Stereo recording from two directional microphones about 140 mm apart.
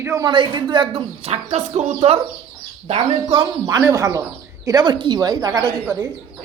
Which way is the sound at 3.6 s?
20° right (ahead or behind).